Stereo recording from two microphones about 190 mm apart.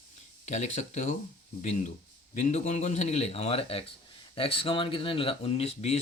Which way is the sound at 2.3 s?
40° left (ahead or behind).